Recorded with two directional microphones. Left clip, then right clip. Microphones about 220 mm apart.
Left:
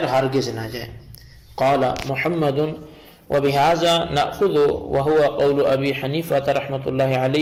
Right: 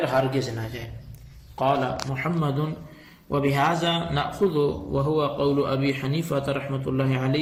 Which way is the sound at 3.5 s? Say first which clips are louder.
Left 7 dB; 15° left (ahead or behind).